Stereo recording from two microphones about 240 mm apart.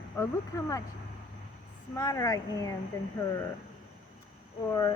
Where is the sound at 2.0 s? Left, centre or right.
Centre.